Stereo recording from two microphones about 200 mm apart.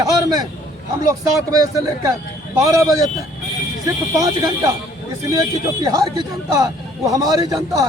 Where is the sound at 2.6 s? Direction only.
15° right (ahead or behind).